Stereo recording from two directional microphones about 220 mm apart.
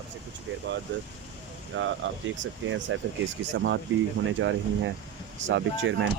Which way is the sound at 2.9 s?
65° right (ahead or behind).